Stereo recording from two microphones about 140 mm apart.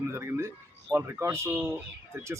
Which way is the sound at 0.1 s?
20° right (ahead or behind).